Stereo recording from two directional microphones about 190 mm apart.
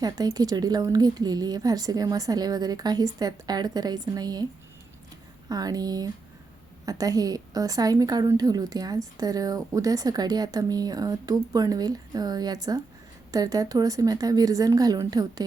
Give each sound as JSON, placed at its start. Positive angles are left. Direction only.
{"t": 0.0, "sound": "a woman's voice", "side_deg": -20}
{"t": 5.5, "sound": "a woman's voice", "side_deg": -20}